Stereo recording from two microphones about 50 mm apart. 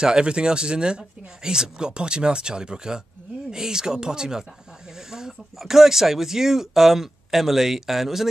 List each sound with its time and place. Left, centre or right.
0.0 s speech: centre